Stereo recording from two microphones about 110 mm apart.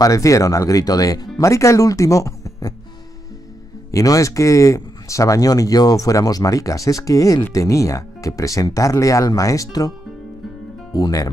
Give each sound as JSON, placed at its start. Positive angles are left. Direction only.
{"t": 0.0, "sound": "speech", "side_deg": 30}
{"t": 3.9, "sound": "speech", "side_deg": 30}